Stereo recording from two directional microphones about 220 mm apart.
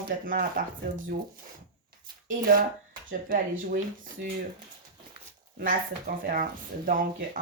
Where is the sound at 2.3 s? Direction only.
40° right (ahead or behind).